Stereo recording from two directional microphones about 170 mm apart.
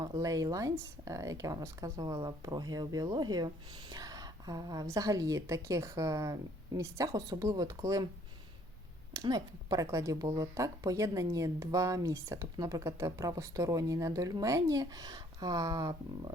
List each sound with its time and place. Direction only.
0.2 s speech: 20° right (ahead or behind)
9.1 s speech: 20° right (ahead or behind)